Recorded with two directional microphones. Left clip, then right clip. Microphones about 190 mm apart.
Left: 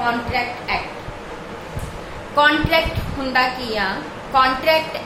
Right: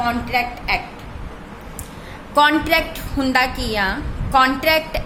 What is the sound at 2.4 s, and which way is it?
A woman's voice, 60° right (ahead or behind).